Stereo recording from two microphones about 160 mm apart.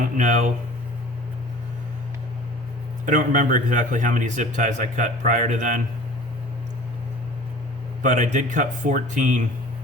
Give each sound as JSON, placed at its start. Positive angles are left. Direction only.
{"t": 0.2, "sound": "a man's voice", "side_deg": -50}
{"t": 3.1, "sound": "a man's voice", "side_deg": -55}
{"t": 8.0, "sound": "a man's voice", "side_deg": -50}